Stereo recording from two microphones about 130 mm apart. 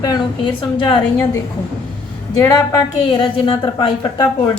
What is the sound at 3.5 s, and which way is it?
Speech, 40° left (ahead or behind).